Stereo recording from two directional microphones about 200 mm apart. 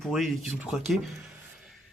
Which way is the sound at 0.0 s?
Centre (ahead or behind).